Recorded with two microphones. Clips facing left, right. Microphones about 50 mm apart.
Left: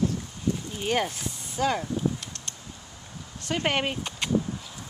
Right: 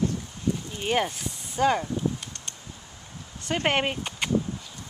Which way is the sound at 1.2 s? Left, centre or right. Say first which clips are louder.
Right 3 dB; centre.